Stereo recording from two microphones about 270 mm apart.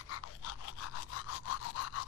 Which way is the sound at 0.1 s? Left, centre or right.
Left.